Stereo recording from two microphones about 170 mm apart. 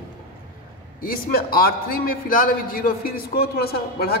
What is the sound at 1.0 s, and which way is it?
A man's voice, 60° left (ahead or behind).